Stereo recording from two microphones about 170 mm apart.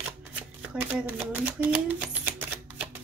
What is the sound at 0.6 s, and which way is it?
Typewriter, 5° right (ahead or behind).